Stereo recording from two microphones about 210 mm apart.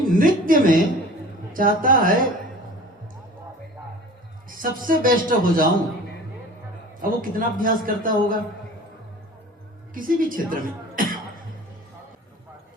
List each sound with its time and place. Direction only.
0.0 s a man's voice: 40° right (ahead or behind)
4.4 s a man's voice: 40° right (ahead or behind)
7.0 s a man's voice: 40° right (ahead or behind)
9.9 s music: 40° right (ahead or behind)